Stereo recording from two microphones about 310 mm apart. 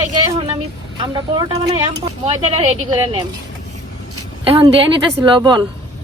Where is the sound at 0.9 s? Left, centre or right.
Centre.